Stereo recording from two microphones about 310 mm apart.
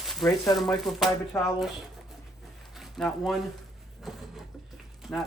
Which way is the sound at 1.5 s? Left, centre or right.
Centre.